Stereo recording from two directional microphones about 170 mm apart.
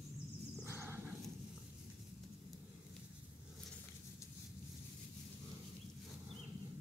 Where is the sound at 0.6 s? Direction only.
15° right (ahead or behind).